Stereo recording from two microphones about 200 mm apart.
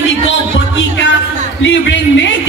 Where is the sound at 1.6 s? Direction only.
65° left (ahead or behind).